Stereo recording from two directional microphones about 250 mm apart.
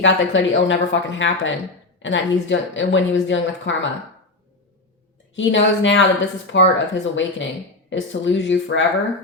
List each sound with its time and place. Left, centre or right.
0.0 s a woman's voice: left
5.4 s a woman's voice: left